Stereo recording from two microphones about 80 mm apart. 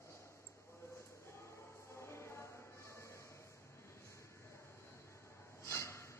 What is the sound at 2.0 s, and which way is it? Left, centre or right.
Music, left.